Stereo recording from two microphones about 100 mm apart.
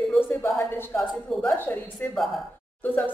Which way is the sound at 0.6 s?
20° left (ahead or behind).